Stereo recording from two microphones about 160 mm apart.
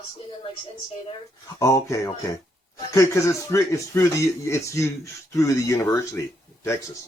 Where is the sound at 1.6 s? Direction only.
20° left (ahead or behind).